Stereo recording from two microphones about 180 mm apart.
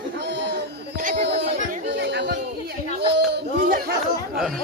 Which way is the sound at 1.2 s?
70° right (ahead or behind).